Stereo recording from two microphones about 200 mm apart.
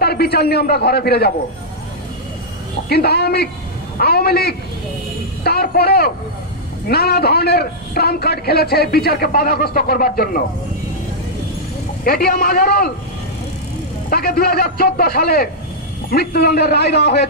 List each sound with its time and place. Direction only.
0.0 s a man's voice: 50° left (ahead or behind)
2.9 s a man's voice: 55° left (ahead or behind)
12.0 s a man's voice: 50° left (ahead or behind)
14.1 s a man's voice: 50° left (ahead or behind)